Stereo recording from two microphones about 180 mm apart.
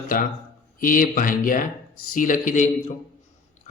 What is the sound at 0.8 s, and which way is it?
A man's voice, 50° left (ahead or behind).